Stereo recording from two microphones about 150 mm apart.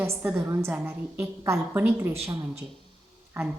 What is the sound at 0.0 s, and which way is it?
Speech, 15° right (ahead or behind).